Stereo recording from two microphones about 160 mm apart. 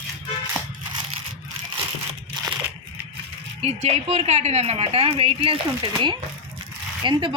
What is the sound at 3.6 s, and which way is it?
A woman's voice, 40° right (ahead or behind).